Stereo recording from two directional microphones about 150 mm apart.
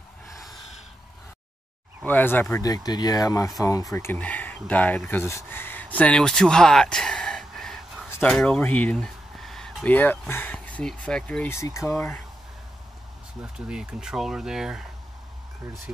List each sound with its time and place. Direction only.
2.0 s speech: 10° left (ahead or behind)
13.4 s speech: 5° right (ahead or behind)